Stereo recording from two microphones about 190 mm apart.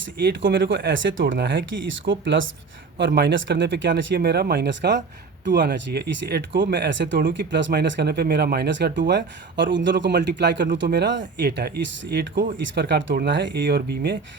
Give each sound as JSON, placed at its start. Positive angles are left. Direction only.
{"t": 0.3, "sound": "speech", "side_deg": -70}
{"t": 3.1, "sound": "speech", "side_deg": -60}
{"t": 13.6, "sound": "speech", "side_deg": -55}